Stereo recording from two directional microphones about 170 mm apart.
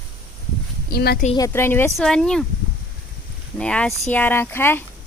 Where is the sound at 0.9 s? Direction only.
70° left (ahead or behind).